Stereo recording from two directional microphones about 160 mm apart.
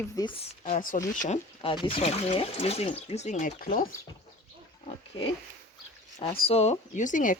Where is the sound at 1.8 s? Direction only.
40° left (ahead or behind); by 3.9 s 55° left (ahead or behind).